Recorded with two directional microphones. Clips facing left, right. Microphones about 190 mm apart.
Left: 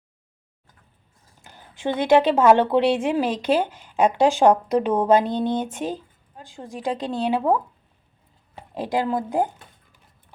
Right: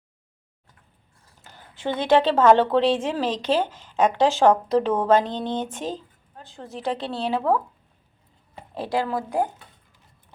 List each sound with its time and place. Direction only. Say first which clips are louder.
1.4 s a woman's voice: left 3 dB; 15° left (ahead or behind)
8.7 s speech: left 2 dB; 15° left (ahead or behind)